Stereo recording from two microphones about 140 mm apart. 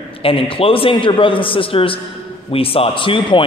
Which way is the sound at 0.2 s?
40° left (ahead or behind).